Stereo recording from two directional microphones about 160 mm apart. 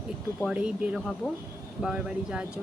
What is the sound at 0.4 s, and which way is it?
A woman's voice, 5° right (ahead or behind).